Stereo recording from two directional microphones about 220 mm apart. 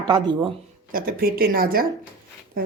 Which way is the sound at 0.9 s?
40° right (ahead or behind).